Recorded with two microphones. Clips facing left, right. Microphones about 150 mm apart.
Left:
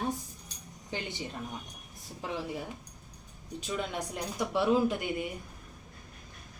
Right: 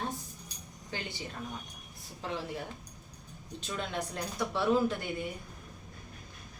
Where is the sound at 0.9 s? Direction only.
20° left (ahead or behind).